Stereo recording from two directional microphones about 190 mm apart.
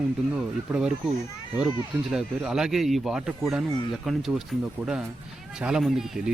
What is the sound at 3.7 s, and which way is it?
Speech, 20° left (ahead or behind).